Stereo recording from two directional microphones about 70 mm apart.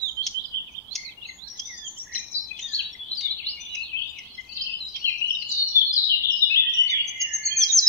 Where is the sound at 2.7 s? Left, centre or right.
Right.